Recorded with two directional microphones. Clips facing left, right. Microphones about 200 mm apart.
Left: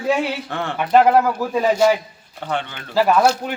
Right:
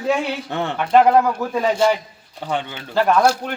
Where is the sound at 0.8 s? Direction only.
5° left (ahead or behind).